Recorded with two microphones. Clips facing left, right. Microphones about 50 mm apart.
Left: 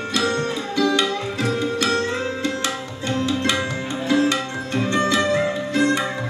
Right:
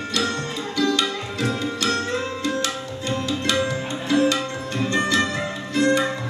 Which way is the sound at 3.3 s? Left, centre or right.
Left.